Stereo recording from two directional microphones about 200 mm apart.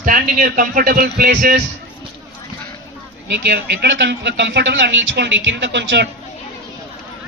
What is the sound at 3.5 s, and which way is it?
Speech, 55° right (ahead or behind).